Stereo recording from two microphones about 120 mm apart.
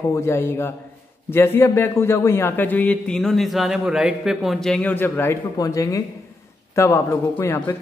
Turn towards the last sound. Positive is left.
turn(degrees=20)  # may be behind; listen again after turning